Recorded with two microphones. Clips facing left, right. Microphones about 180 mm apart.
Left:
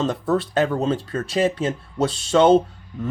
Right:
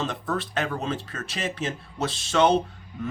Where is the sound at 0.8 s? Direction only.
30° left (ahead or behind).